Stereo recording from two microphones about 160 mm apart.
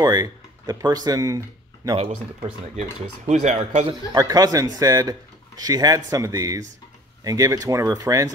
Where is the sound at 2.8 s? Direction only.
45° right (ahead or behind).